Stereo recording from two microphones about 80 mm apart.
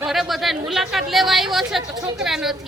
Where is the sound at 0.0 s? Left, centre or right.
Centre.